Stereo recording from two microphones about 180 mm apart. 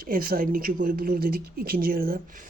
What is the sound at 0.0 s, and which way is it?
A man's voice, 55° right (ahead or behind).